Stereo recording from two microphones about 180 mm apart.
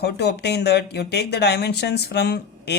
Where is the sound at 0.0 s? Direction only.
65° left (ahead or behind).